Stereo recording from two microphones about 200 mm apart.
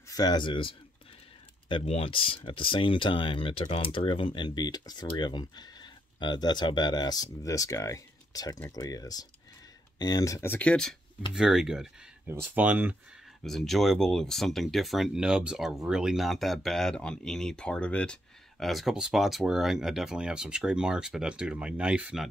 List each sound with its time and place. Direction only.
0.1 s speech: 20° left (ahead or behind); by 22.3 s 5° right (ahead or behind)